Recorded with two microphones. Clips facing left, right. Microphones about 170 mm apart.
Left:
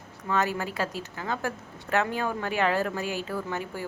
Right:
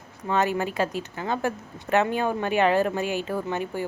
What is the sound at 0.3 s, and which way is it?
A woman's voice, 20° right (ahead or behind).